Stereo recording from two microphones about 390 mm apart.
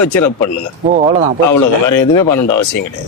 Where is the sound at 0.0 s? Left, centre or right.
Left.